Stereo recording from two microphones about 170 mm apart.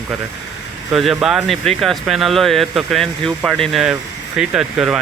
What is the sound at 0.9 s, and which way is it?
Speech, centre (ahead or behind).